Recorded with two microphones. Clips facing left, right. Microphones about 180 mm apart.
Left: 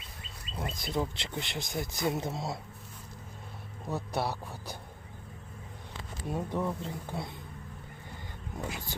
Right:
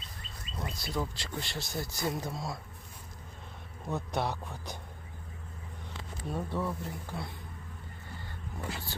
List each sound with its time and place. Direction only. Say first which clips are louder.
0.5 s speech: left 2 dB; 20° left (ahead or behind)
3.8 s a man's voice: even; 5° left (ahead or behind)
6.2 s speech: left 2 dB; 15° left (ahead or behind)
8.5 s speech: left 2 dB; 15° left (ahead or behind)